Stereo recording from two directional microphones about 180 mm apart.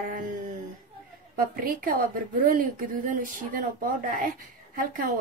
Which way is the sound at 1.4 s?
55° right (ahead or behind).